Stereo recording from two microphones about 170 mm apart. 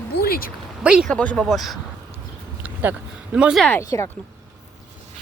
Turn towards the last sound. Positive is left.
turn(degrees=15)  # may be behind; listen again after turning